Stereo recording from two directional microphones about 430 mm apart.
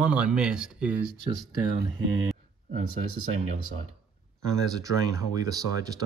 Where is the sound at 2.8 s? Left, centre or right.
Right.